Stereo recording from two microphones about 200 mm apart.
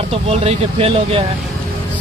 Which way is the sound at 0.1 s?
30° right (ahead or behind).